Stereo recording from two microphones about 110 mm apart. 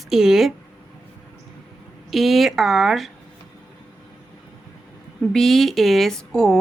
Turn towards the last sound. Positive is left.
turn(degrees=5)  # may be behind; listen again after turning